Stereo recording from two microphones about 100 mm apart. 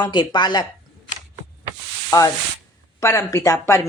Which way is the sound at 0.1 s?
50° left (ahead or behind).